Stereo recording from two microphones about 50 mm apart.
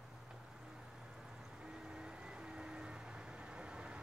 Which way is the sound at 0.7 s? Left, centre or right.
Centre.